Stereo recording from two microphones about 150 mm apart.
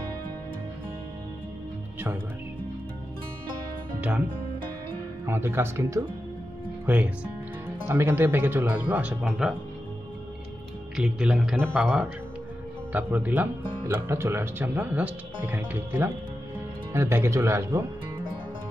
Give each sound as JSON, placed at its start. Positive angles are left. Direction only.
{"t": 5.2, "sound": "speech", "side_deg": -15}
{"t": 11.0, "sound": "speech", "side_deg": -5}